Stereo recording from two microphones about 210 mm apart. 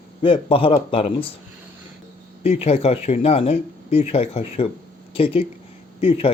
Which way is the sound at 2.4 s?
30° left (ahead or behind).